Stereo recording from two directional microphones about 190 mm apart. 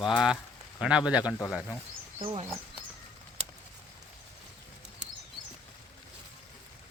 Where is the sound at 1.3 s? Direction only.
10° left (ahead or behind).